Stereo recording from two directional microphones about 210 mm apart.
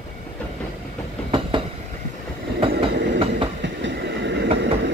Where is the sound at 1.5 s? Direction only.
25° right (ahead or behind).